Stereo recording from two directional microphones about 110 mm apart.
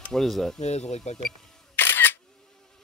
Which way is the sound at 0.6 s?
90° left.